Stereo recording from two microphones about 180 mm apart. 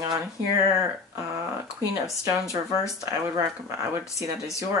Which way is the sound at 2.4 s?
15° left (ahead or behind).